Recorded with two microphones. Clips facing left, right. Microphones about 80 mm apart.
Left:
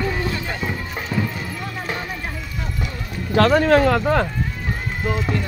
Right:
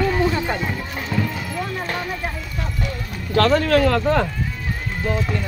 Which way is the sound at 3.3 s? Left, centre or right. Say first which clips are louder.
Left 2 dB; centre.